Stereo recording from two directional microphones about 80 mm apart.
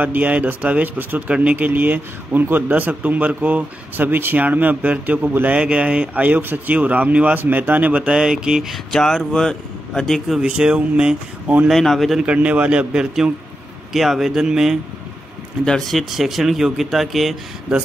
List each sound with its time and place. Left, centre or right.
0.0 s speech: right
8.9 s speech: centre
10.4 s speech: centre
11.7 s speech: centre
12.2 s speech: centre
15.6 s speech: centre